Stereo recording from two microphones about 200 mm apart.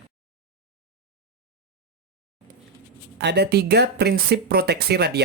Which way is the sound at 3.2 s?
55° right (ahead or behind).